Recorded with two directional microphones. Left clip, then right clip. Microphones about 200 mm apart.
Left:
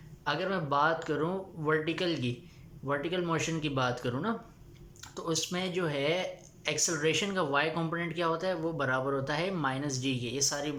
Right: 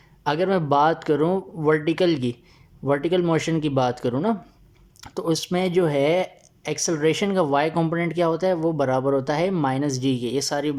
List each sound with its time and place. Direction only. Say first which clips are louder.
0.3 s speech: right 10 dB; 40° right (ahead or behind)